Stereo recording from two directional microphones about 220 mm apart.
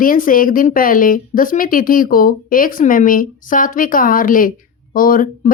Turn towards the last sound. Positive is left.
turn(degrees=40)  # may be behind; listen again after turning